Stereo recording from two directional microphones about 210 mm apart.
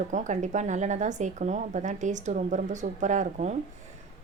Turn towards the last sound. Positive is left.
turn(degrees=-35)  # may be behind; listen again after turning